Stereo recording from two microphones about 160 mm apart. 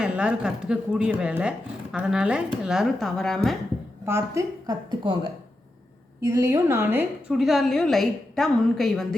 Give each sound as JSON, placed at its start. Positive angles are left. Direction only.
{"t": 0.0, "sound": "a woman's voice", "side_deg": -5}
{"t": 4.0, "sound": "a woman's voice", "side_deg": -15}
{"t": 6.2, "sound": "a woman's voice", "side_deg": -20}
{"t": 7.3, "sound": "a woman's voice", "side_deg": 0}